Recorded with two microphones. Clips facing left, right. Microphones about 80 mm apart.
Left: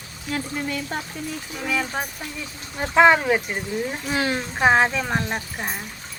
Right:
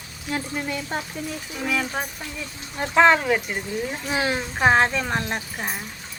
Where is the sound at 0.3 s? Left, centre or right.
Right.